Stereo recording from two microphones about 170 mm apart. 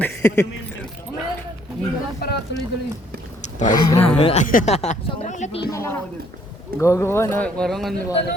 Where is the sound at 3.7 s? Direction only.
25° left (ahead or behind).